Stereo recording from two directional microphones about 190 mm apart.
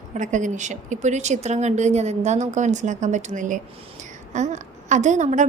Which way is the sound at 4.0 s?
40° right (ahead or behind).